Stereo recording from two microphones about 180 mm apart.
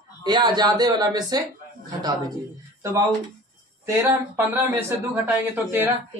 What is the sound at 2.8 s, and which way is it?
Speech, 15° right (ahead or behind).